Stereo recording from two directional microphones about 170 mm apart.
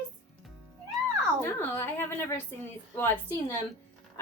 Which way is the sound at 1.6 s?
10° left (ahead or behind).